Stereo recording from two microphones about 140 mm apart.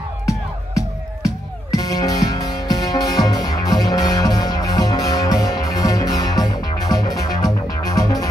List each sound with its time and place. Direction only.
0.3 s music: 25° left (ahead or behind)